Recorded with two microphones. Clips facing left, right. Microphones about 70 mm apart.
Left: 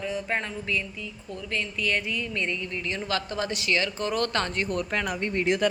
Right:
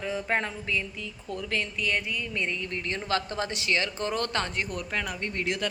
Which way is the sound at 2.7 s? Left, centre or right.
Right.